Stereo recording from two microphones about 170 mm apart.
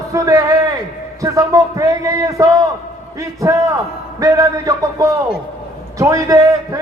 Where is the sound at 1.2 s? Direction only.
20° right (ahead or behind).